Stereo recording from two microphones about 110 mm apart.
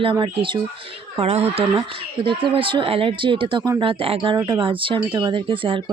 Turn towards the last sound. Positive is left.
turn(degrees=-50)  # may be behind; listen again after turning